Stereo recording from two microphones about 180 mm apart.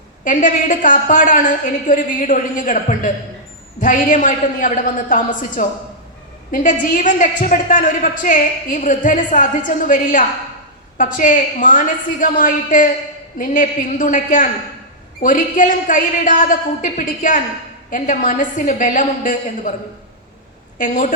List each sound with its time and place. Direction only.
0.3 s a woman's voice: 45° left (ahead or behind)
20.7 s a woman's voice: 45° left (ahead or behind)